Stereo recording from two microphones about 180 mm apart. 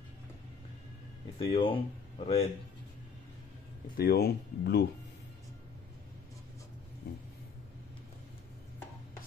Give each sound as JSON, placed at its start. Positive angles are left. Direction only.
{"t": 1.4, "sound": "speech", "side_deg": 30}
{"t": 3.9, "sound": "speech", "side_deg": 60}
{"t": 7.0, "sound": "vehicle", "side_deg": 65}